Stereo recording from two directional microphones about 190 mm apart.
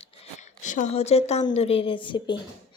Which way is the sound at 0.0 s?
40° left (ahead or behind).